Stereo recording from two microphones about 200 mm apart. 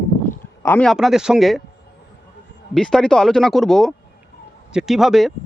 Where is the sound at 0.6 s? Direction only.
5° left (ahead or behind).